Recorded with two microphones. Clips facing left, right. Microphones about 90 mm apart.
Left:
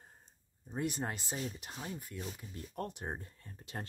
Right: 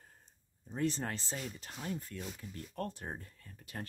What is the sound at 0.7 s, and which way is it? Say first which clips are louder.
Speech: right 2 dB; 15° left (ahead or behind).